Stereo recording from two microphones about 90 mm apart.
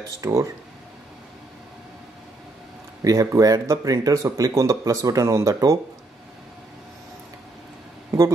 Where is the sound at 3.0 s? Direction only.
40° right (ahead or behind).